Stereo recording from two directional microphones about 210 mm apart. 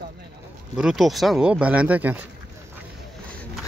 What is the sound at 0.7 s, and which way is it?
Speech, centre (ahead or behind).